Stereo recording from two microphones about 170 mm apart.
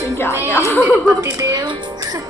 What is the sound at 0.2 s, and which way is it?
Music, 15° left (ahead or behind).